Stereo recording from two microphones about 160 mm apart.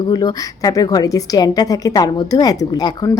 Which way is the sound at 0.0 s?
25° left (ahead or behind).